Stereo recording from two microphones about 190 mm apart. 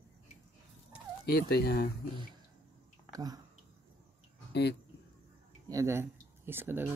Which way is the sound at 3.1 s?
20° right (ahead or behind).